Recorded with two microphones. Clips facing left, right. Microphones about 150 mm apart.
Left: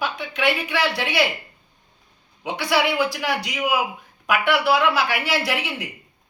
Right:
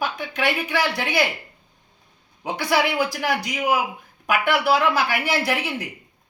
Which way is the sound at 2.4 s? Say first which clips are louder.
Even; 45° right (ahead or behind).